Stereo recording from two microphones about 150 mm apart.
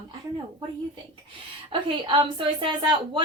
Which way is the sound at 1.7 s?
30° right (ahead or behind).